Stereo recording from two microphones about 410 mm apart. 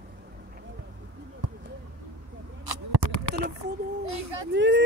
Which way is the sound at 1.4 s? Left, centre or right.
Right.